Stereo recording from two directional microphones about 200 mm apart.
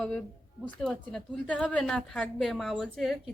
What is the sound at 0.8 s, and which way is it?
A woman's voice, 5° left (ahead or behind).